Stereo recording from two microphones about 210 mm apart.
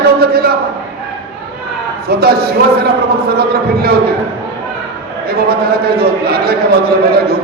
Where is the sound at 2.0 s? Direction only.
45° right (ahead or behind).